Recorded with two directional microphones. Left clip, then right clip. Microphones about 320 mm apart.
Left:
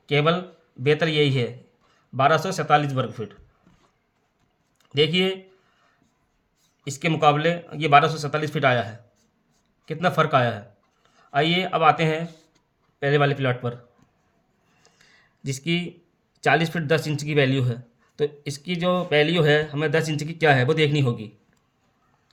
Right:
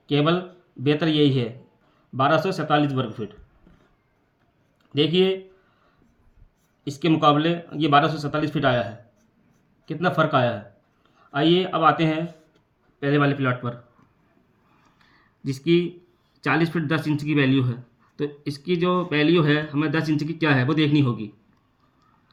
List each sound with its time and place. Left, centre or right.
0.0 s speech: left
4.9 s speech: left
6.8 s speech: left
15.6 s speech: left
18.6 s speech: left